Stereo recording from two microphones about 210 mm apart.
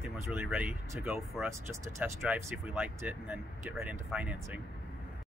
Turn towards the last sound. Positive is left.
turn(degrees=-5)  # may be behind; listen again after turning